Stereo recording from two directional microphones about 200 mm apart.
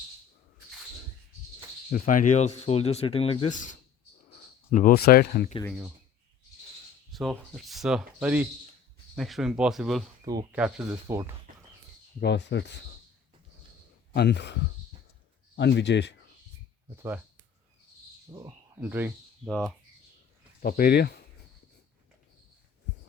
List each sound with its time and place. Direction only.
1.9 s speech: 40° left (ahead or behind)
7.1 s speech: centre (ahead or behind)
12.2 s a man's voice: 60° left (ahead or behind)
14.1 s a man's voice: 55° left (ahead or behind)
15.5 s a man's voice: 60° left (ahead or behind)
18.3 s speech: 20° right (ahead or behind)
18.8 s speech: 10° right (ahead or behind)
19.5 s speech: 5° left (ahead or behind)
20.6 s speech: 45° left (ahead or behind)